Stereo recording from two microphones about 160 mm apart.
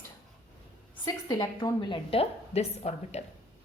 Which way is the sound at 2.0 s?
40° left (ahead or behind).